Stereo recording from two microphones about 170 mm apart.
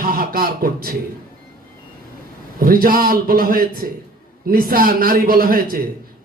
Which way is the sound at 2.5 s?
60° right (ahead or behind).